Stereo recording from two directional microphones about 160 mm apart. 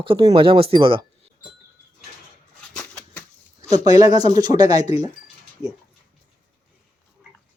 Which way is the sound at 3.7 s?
25° right (ahead or behind).